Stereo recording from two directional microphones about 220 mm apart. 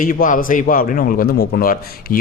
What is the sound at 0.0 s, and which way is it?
A man's voice, 40° left (ahead or behind).